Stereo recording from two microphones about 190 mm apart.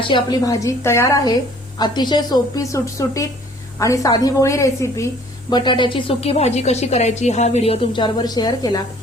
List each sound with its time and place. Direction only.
0.0 s a woman's voice: 25° left (ahead or behind)